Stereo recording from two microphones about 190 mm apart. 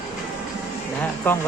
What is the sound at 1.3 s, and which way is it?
Speech, 10° left (ahead or behind).